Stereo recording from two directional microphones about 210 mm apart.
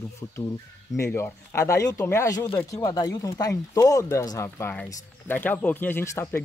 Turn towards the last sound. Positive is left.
turn(degrees=15)  # may be behind; listen again after turning